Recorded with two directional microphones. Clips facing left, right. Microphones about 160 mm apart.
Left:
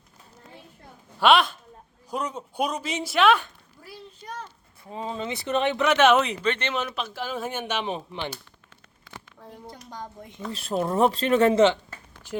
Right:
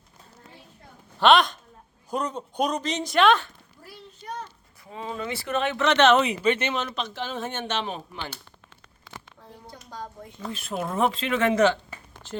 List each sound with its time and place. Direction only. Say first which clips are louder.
1.2 s a man's voice: right 1 dB; 5° left (ahead or behind)
4.9 s speech: left 1 dB; 30° left (ahead or behind)
5.9 s a man's voice: right 1 dB; 10° left (ahead or behind)
6.2 s speech: right 3 dB; 10° right (ahead or behind)
6.7 s a man's voice: even; 5° left (ahead or behind)
10.5 s speech: left 4 dB; 35° left (ahead or behind)